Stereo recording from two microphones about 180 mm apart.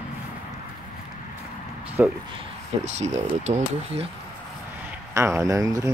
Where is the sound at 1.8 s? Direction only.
10° right (ahead or behind).